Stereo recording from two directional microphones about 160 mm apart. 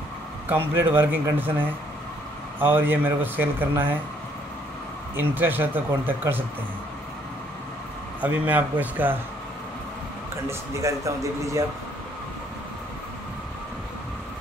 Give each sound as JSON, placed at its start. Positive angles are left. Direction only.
{"t": 0.5, "sound": "speech", "side_deg": -15}
{"t": 2.6, "sound": "speech", "side_deg": -15}
{"t": 5.1, "sound": "speech", "side_deg": -10}
{"t": 8.2, "sound": "speech", "side_deg": -10}
{"t": 10.3, "sound": "speech", "side_deg": -20}